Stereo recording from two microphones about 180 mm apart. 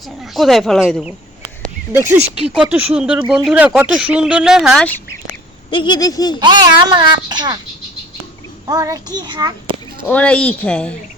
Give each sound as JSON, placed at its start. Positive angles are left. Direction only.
{"t": 0.2, "sound": "speech", "side_deg": 0}
{"t": 1.9, "sound": "speech", "side_deg": -15}
{"t": 5.7, "sound": "speech", "side_deg": 25}
{"t": 6.4, "sound": "a child's voice", "side_deg": -25}
{"t": 8.6, "sound": "a child's voice", "side_deg": -20}
{"t": 10.1, "sound": "speech", "side_deg": 5}